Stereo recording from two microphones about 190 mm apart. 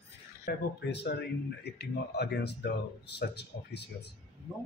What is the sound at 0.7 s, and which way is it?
Speech, 60° left (ahead or behind).